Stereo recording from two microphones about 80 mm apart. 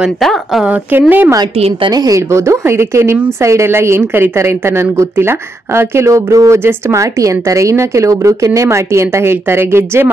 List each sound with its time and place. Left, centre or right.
0.2 s a woman's voice: centre
0.9 s speech: right
1.9 s a woman's voice: right
2.3 s speech: right